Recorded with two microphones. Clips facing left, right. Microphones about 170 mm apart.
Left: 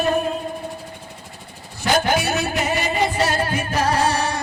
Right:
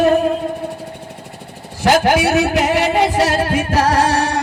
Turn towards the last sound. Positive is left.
turn(degrees=-90)